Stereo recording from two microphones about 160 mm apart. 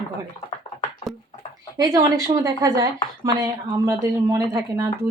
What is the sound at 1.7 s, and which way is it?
Speech, 20° right (ahead or behind).